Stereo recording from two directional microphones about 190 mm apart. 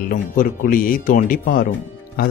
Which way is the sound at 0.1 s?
45° left (ahead or behind).